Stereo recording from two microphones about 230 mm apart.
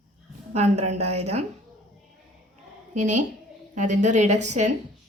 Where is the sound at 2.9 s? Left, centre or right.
Right.